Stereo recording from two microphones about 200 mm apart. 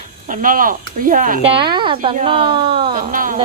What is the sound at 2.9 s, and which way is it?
Speech, 40° right (ahead or behind).